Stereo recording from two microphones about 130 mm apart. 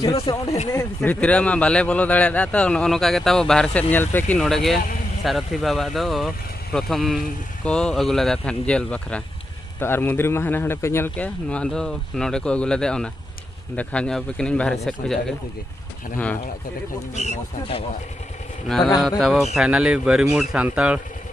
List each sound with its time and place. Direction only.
0.3 s speech: 35° left (ahead or behind)
1.0 s speech: 10° left (ahead or behind)
4.4 s speech: centre (ahead or behind)
17.1 s speech: 60° left (ahead or behind)
19.0 s speech: centre (ahead or behind)